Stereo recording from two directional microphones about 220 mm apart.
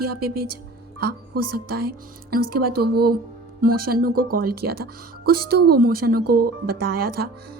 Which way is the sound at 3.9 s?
40° right (ahead or behind).